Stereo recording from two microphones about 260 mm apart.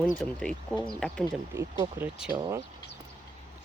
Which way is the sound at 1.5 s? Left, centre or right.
Centre.